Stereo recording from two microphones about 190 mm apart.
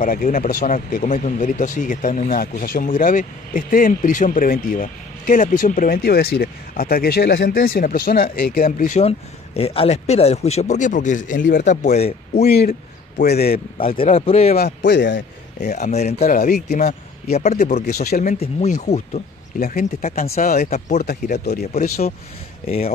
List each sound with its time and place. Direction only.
0.0 s speech: 45° left (ahead or behind)
12.4 s a man's voice: 55° left (ahead or behind)
13.7 s speech: 30° left (ahead or behind)
14.6 s a man's voice: 70° left (ahead or behind)
15.6 s speech: 35° left (ahead or behind)
17.8 s a man's voice: 55° left (ahead or behind)
18.6 s speech: 35° left (ahead or behind)